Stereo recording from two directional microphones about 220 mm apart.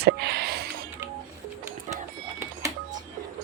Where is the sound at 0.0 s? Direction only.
45° right (ahead or behind).